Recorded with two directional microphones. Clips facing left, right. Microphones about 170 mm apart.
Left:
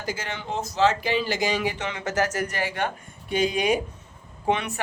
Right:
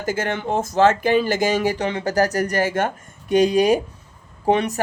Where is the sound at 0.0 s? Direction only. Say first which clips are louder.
Right 8 dB; 50° right (ahead or behind).